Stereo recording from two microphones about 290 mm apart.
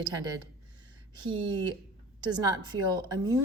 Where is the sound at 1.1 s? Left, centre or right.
Centre.